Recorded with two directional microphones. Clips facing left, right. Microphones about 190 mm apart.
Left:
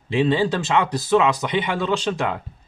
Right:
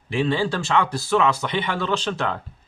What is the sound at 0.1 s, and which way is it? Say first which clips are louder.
A man's voice: left 3 dB; 20° left (ahead or behind).